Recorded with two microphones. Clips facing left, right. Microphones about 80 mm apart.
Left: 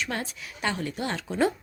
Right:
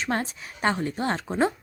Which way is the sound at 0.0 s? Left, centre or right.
Right.